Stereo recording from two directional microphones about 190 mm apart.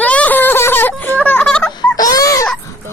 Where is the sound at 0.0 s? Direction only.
5° left (ahead or behind).